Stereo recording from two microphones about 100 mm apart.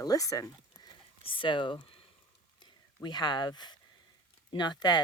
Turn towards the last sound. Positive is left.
turn(degrees=45)  # may be behind; listen again after turning